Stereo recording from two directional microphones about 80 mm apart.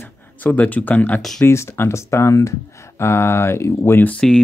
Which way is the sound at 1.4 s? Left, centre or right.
Left.